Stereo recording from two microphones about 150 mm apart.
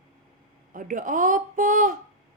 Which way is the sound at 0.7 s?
60° right (ahead or behind).